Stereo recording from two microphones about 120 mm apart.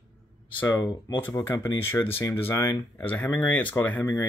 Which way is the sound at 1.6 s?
20° left (ahead or behind).